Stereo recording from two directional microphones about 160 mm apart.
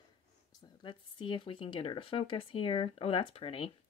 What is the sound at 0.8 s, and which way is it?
Speech, 30° left (ahead or behind).